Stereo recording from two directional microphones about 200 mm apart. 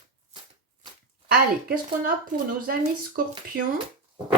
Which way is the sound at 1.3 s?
45° right (ahead or behind).